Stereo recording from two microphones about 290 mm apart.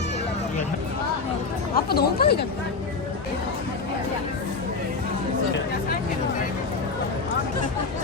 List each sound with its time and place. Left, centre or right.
1.7 s speech: left